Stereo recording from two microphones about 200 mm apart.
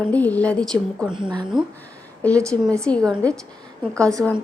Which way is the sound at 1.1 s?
25° right (ahead or behind).